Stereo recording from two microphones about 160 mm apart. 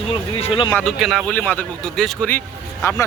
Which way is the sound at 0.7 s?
5° left (ahead or behind).